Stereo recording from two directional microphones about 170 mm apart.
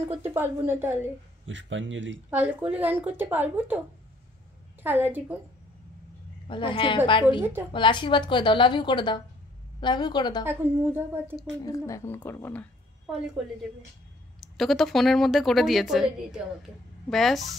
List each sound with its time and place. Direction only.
0.1 s a woman's voice: 15° right (ahead or behind)
1.5 s speech: 90° right
2.3 s a woman's voice: 10° right (ahead or behind)
4.8 s a woman's voice: 10° right (ahead or behind)
6.4 s a woman's voice: 30° left (ahead or behind)
10.4 s a woman's voice: 15° right (ahead or behind)
11.6 s a woman's voice: 20° left (ahead or behind)
14.4 s speech: centre (ahead or behind)